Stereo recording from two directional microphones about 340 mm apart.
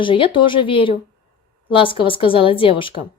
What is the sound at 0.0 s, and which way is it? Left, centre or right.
Speech, centre.